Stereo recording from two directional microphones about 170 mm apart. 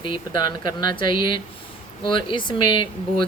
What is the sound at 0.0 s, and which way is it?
Speech, 25° left (ahead or behind).